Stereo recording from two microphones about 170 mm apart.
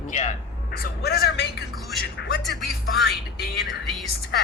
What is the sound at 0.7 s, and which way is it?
Speech, 65° left (ahead or behind).